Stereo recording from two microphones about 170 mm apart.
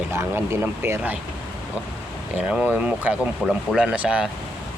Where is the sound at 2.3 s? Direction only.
5° right (ahead or behind).